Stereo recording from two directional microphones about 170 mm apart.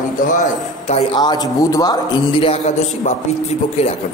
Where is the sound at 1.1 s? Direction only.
25° left (ahead or behind).